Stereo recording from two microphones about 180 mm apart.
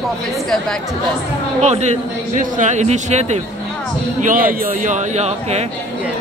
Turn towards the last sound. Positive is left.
turn(degrees=-35)  # may be behind; listen again after turning